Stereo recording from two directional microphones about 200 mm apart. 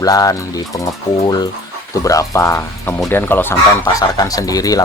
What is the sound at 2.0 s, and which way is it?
Speech, 15° left (ahead or behind).